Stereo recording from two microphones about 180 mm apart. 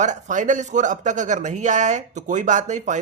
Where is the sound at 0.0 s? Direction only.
45° right (ahead or behind).